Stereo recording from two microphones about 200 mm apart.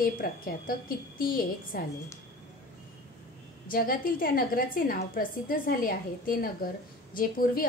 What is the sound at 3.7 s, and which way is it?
A woman's voice, 45° left (ahead or behind).